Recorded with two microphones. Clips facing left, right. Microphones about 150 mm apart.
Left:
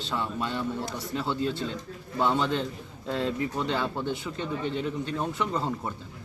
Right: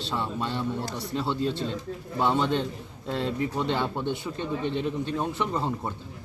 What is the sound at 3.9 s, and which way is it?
Speech, 20° right (ahead or behind).